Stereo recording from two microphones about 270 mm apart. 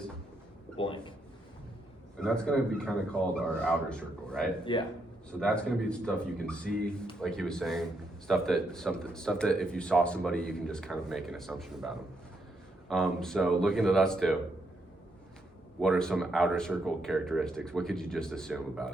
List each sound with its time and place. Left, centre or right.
0.8 s speech: centre
2.1 s speech: centre
4.7 s speech: centre
5.4 s speech: centre
12.9 s speech: centre
15.8 s speech: centre